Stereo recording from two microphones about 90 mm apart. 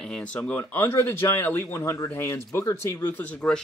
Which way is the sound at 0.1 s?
15° left (ahead or behind).